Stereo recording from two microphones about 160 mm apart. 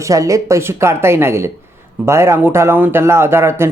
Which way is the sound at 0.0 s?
20° right (ahead or behind).